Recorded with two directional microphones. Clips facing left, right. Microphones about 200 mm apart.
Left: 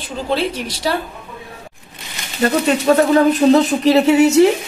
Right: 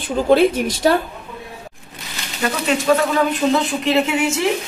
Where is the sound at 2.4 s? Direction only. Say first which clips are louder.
Left 4 dB; 40° left (ahead or behind).